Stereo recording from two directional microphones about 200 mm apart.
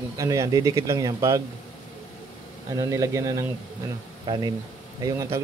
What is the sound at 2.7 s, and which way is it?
Speech, 15° right (ahead or behind).